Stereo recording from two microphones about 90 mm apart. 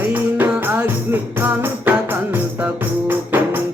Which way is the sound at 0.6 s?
20° right (ahead or behind).